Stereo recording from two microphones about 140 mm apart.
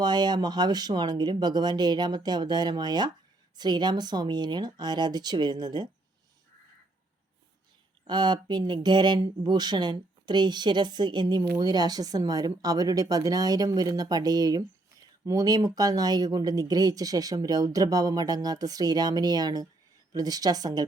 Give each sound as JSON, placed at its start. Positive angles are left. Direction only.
{"t": 0.0, "sound": "speech", "side_deg": -30}
{"t": 8.0, "sound": "speech", "side_deg": -30}